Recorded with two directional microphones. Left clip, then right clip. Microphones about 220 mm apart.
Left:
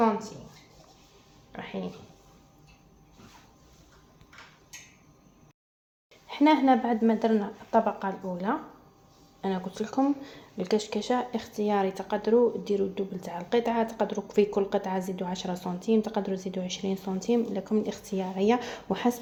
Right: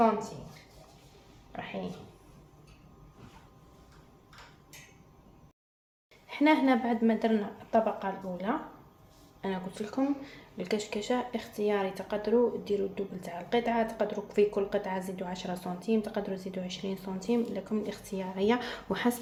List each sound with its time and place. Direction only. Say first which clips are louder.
6.2 s speech: left 3 dB; 25° left (ahead or behind)